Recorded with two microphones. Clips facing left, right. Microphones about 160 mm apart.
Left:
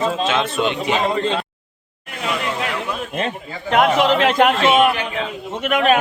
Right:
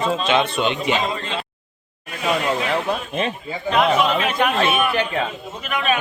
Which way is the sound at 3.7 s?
75° left (ahead or behind).